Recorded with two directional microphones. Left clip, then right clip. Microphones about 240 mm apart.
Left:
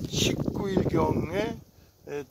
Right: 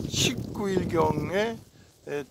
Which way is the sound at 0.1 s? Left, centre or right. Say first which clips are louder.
Even; right.